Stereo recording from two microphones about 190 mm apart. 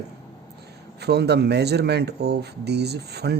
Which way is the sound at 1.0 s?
60° right (ahead or behind).